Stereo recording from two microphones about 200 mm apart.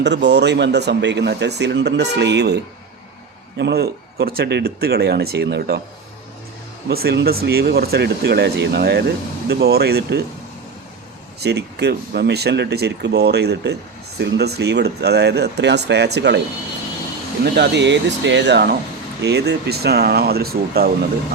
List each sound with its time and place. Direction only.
0.0 s speech: 60° right (ahead or behind)
3.6 s speech: 55° right (ahead or behind)
6.8 s speech: 50° right (ahead or behind)
11.3 s speech: 55° right (ahead or behind)
17.4 s speech: 55° right (ahead or behind)